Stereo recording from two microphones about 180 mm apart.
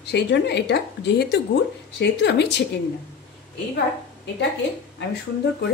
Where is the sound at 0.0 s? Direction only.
70° left (ahead or behind).